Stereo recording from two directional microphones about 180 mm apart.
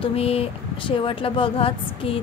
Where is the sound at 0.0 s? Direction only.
35° left (ahead or behind).